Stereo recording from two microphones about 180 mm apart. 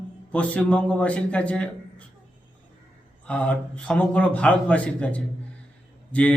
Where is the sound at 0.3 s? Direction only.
5° left (ahead or behind).